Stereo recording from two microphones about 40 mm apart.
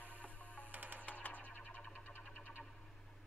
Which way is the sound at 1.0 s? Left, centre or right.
Left.